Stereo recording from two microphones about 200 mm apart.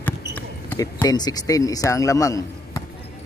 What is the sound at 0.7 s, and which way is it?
A man's voice, 15° left (ahead or behind).